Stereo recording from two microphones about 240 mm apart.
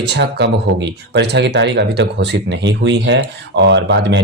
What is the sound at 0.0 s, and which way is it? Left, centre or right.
Speech, right.